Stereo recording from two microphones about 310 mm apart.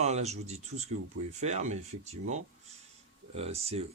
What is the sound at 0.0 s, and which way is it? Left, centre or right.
Speech, right.